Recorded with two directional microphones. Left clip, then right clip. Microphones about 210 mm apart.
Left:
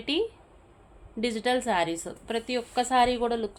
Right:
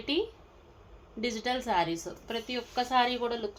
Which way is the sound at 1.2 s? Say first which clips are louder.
Left 5 dB; 50° left (ahead or behind).